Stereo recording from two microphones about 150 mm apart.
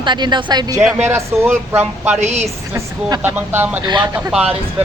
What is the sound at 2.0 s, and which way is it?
Speech, 50° right (ahead or behind).